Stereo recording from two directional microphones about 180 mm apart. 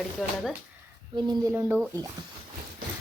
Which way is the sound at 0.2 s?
Centre (ahead or behind).